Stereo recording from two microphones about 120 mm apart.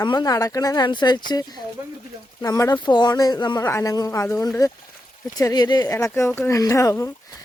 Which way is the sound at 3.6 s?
20° left (ahead or behind).